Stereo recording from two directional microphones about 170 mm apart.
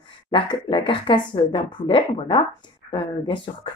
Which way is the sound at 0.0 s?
30° left (ahead or behind).